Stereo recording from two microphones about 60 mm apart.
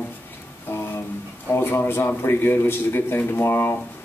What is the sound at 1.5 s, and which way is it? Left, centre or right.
Speech, left.